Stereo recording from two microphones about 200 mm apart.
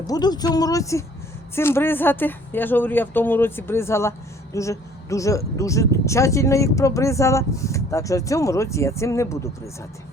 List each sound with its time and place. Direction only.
0.1 s a woman's voice: 20° left (ahead or behind)